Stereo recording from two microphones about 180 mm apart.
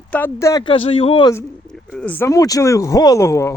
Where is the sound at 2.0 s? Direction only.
10° left (ahead or behind).